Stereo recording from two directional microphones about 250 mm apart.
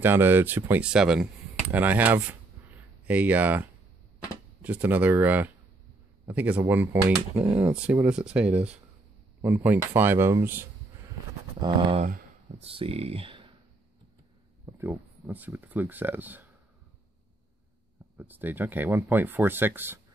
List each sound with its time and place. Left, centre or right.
0.0 s speech: centre
11.6 s speech: right
14.7 s speech: centre
18.1 s speech: centre